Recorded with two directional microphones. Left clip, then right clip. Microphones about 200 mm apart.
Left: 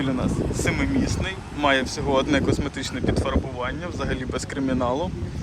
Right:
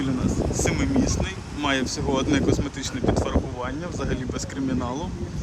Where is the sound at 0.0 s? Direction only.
10° right (ahead or behind).